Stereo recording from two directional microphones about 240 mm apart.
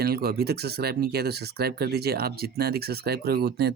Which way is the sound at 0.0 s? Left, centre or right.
Right.